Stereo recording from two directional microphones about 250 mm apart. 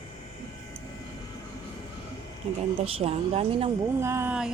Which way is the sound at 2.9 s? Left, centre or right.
Right.